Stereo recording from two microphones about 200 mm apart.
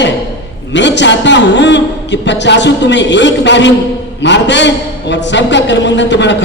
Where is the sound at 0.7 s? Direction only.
60° left (ahead or behind).